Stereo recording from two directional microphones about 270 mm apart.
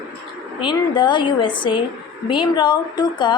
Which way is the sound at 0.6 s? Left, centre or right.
Centre.